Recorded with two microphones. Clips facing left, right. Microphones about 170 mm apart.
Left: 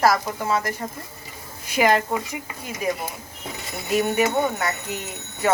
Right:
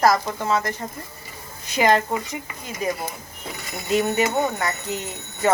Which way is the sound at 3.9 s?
10° left (ahead or behind).